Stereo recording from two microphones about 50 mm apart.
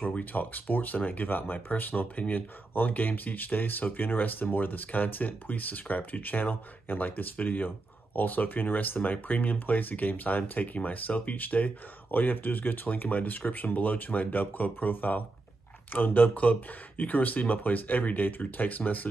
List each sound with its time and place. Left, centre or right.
0.0 s speech: left